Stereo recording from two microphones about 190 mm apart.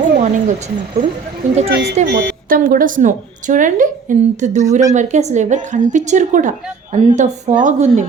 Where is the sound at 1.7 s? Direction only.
55° right (ahead or behind).